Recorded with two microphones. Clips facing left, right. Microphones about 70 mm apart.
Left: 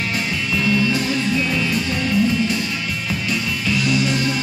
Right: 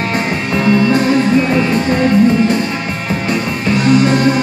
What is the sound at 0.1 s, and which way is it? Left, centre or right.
Music, right.